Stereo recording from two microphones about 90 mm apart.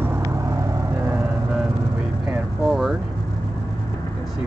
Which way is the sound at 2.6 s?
5° right (ahead or behind).